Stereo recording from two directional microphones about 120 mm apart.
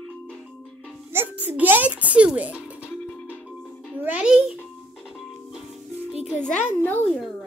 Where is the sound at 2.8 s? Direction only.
15° left (ahead or behind).